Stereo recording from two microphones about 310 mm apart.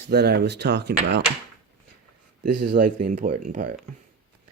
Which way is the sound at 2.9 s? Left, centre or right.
Right.